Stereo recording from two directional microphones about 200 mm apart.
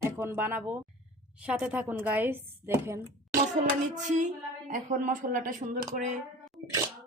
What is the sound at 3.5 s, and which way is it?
Speech, 40° right (ahead or behind).